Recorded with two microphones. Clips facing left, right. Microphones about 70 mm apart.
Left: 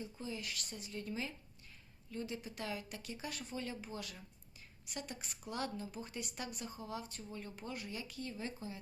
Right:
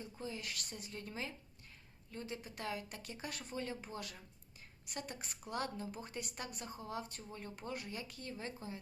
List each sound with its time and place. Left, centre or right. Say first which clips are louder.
0.2 s a woman's voice: right 2 dB; right